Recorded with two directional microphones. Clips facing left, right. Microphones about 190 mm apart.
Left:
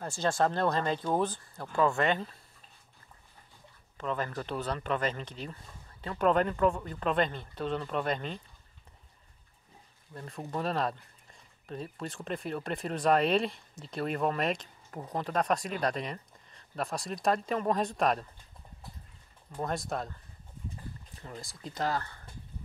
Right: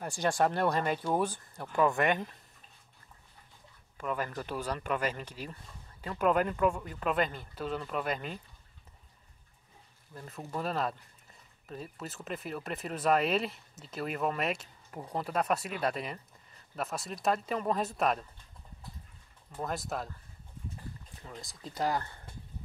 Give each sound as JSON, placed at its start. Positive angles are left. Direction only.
{"t": 0.0, "sound": "speech", "side_deg": -15}
{"t": 4.0, "sound": "speech", "side_deg": -10}
{"t": 10.1, "sound": "speech", "side_deg": -5}
{"t": 19.6, "sound": "speech", "side_deg": -5}
{"t": 21.2, "sound": "speech", "side_deg": 0}
{"t": 21.7, "sound": "speech", "side_deg": -15}